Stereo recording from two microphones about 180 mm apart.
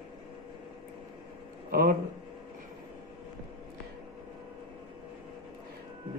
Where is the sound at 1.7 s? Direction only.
55° right (ahead or behind).